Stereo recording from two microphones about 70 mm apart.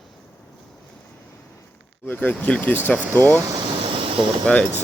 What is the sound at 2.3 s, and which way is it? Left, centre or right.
Speech, centre.